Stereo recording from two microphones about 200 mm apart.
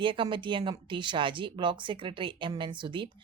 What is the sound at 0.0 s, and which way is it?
Speech, 25° right (ahead or behind).